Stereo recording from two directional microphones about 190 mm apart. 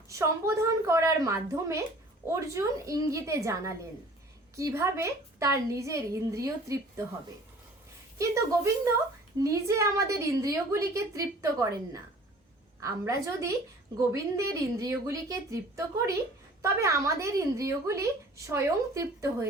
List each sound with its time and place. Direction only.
0.1 s a woman's voice: 15° right (ahead or behind)
8.2 s a woman's voice: 15° right (ahead or behind)